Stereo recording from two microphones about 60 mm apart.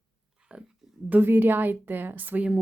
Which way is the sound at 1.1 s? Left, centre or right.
Right.